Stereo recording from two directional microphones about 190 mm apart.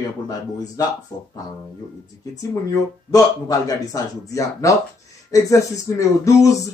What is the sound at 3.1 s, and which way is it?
Speech, 20° left (ahead or behind).